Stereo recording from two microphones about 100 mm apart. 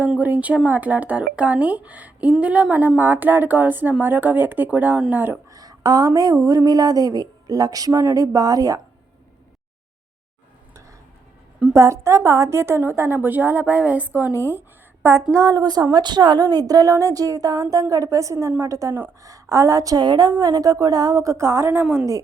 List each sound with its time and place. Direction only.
0.2 s a woman's voice: 15° right (ahead or behind)
5.2 s speech: 25° right (ahead or behind)
5.5 s speech: 40° right (ahead or behind)
11.7 s a woman's voice: 30° right (ahead or behind)
15.3 s speech: 35° right (ahead or behind)